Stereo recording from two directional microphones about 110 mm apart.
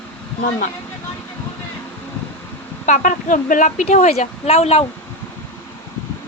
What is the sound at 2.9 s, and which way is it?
A woman's voice, 90° left.